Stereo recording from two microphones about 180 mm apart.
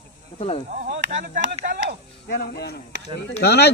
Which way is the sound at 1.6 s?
65° right (ahead or behind).